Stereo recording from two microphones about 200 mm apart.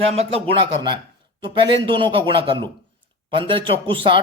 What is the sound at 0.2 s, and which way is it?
Speech, 25° right (ahead or behind).